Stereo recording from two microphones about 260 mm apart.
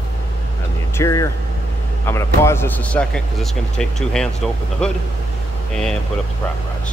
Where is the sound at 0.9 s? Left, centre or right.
Centre.